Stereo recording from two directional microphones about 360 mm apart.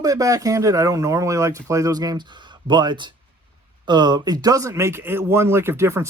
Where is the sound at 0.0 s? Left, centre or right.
Centre.